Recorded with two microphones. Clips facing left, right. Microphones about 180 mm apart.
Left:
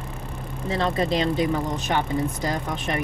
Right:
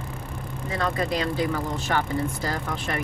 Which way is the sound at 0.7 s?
25° left (ahead or behind).